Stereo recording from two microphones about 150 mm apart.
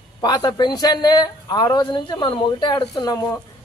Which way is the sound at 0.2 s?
25° left (ahead or behind).